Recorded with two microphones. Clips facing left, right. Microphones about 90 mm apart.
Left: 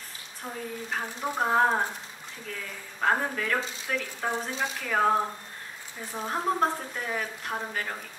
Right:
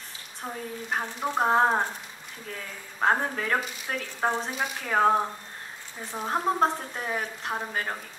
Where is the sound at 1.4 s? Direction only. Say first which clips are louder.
Right 2 dB; 30° right (ahead or behind).